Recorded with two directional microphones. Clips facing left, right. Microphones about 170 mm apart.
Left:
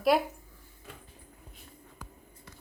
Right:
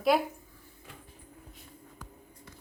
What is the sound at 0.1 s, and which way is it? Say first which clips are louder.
Speech: left 1 dB; centre (ahead or behind).